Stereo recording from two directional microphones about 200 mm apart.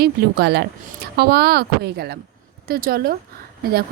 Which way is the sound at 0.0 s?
55° right (ahead or behind).